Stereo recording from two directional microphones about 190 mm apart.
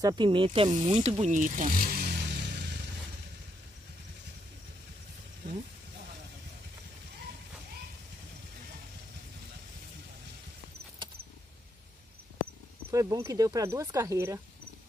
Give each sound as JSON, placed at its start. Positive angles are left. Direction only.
{"t": 0.0, "sound": "speech", "side_deg": -25}
{"t": 12.9, "sound": "speech", "side_deg": -15}